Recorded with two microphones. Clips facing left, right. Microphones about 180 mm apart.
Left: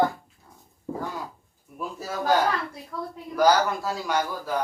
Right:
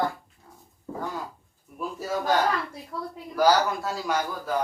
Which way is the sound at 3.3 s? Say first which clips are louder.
Left 1 dB; centre (ahead or behind).